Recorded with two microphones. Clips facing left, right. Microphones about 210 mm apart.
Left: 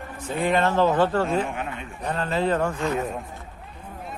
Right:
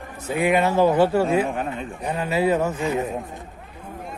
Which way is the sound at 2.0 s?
10° right (ahead or behind).